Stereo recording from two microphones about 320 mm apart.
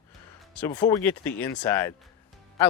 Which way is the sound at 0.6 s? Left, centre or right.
Centre.